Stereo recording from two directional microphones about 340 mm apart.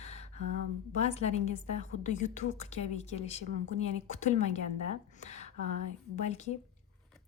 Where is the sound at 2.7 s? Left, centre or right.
Centre.